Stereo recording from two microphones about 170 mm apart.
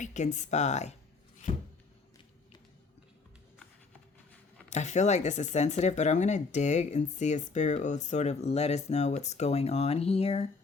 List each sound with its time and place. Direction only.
0.0 s speech: 45° left (ahead or behind)
1.4 s a sound: 45° left (ahead or behind)
4.7 s speech: 45° left (ahead or behind)